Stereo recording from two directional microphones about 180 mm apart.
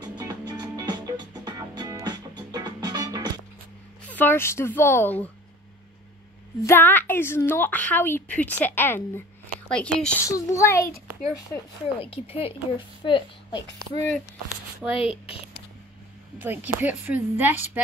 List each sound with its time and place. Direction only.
0.0 s music: 20° right (ahead or behind)
4.1 s a woman's voice: 10° left (ahead or behind)
6.6 s a woman's voice: 10° left (ahead or behind)
10.2 s a woman's voice: 15° left (ahead or behind)
12.0 s a woman's voice: 30° left (ahead or behind)
14.8 s speech: centre (ahead or behind)
16.3 s a woman's voice: 10° right (ahead or behind)